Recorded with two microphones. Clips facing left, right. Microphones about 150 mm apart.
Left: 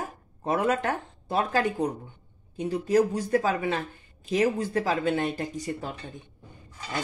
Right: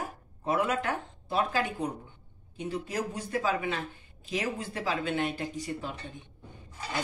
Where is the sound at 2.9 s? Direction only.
40° left (ahead or behind).